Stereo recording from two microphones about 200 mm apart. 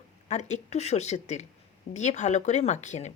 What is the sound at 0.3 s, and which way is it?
Speech, 35° left (ahead or behind).